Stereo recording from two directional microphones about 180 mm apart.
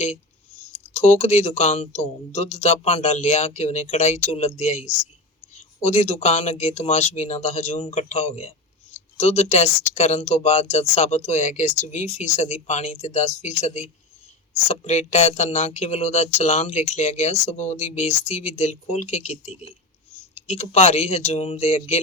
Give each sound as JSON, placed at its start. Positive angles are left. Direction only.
{"t": 0.9, "sound": "speech", "side_deg": 40}